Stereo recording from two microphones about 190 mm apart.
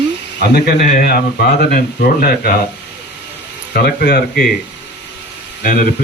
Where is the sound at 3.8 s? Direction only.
55° left (ahead or behind).